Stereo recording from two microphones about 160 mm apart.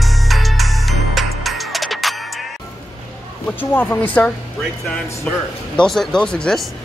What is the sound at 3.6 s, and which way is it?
Speech, 10° left (ahead or behind).